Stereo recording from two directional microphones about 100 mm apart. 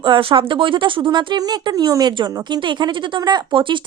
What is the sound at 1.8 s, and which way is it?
A woman's voice, 40° right (ahead or behind).